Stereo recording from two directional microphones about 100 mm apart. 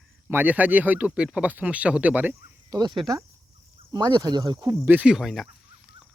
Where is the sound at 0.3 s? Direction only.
20° right (ahead or behind).